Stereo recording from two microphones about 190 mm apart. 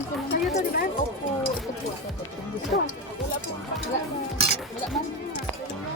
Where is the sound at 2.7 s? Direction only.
45° left (ahead or behind).